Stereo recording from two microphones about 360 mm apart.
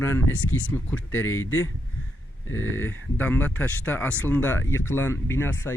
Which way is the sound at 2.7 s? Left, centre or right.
Centre.